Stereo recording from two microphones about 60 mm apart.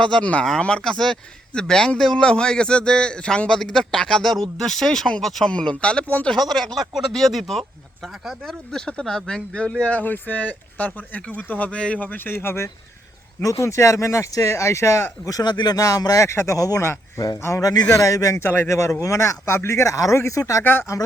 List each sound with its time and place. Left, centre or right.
0.0 s a man's voice: centre
5.5 s a man's voice: centre
6.1 s speech: left
6.3 s speech: centre
8.4 s speech: centre
11.9 s speech: left
13.4 s speech: left
15.3 s speech: left
16.2 s speech: left
16.6 s speech: left
17.2 s speech: left
18.4 s speech: left
18.7 s speech: left